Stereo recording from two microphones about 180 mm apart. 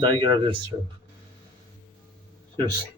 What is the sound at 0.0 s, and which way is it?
Speech, 25° right (ahead or behind).